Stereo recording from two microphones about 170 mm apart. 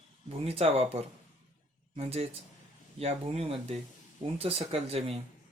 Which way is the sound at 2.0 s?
35° right (ahead or behind).